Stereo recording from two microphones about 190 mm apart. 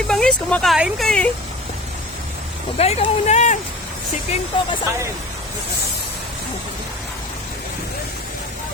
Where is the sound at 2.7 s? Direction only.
35° left (ahead or behind).